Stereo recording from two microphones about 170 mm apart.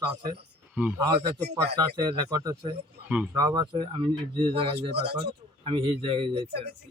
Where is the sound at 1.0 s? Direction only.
30° right (ahead or behind).